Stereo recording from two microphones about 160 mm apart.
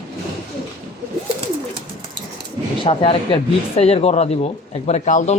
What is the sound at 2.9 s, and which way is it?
Speech, 35° left (ahead or behind).